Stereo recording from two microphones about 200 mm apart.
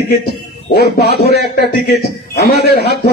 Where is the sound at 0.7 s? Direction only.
55° left (ahead or behind).